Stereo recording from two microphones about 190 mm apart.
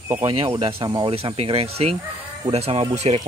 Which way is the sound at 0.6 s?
30° right (ahead or behind).